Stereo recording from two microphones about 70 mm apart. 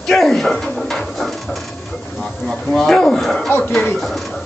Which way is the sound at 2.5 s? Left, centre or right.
Centre.